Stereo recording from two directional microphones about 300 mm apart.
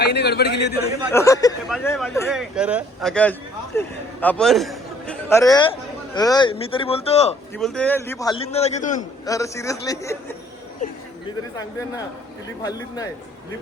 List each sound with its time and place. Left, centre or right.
0.0 s a man's voice: left
1.1 s a man's voice: centre
7.5 s a man's voice: centre; by 9.0 s left
9.2 s a man's voice: centre
10.8 s speech: left